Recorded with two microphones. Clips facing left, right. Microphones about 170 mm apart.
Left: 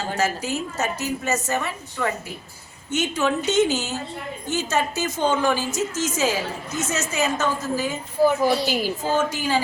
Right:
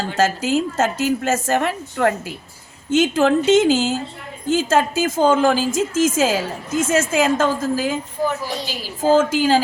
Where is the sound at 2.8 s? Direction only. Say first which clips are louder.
Right 7 dB; 90° right.